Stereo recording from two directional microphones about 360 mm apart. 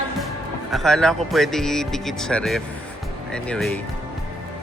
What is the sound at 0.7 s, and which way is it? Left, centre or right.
Speech, centre.